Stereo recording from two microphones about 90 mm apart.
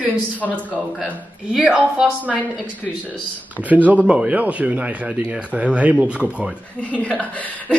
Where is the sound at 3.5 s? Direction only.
15° right (ahead or behind).